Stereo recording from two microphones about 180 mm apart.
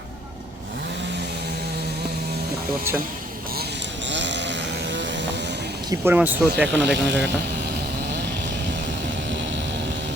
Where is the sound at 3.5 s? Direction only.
65° right (ahead or behind).